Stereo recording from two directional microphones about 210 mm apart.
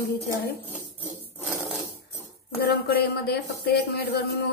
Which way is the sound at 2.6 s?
50° left (ahead or behind).